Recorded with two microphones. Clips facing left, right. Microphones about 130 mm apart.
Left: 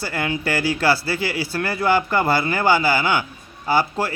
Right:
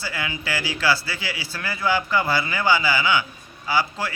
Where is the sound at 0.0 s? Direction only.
50° left (ahead or behind).